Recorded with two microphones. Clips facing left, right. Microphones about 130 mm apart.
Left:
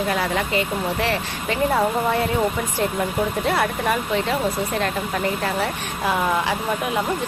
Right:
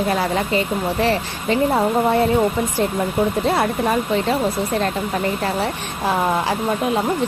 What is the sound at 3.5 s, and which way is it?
Speech, 25° right (ahead or behind).